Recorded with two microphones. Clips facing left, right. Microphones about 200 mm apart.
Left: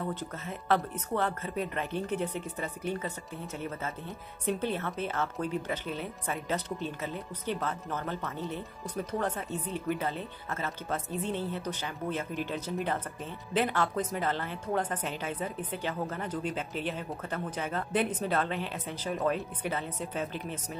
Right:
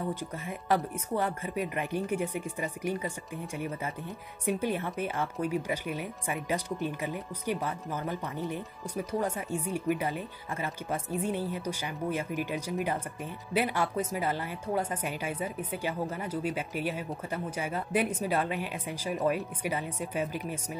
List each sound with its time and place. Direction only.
0.1 s a woman's voice: 10° right (ahead or behind)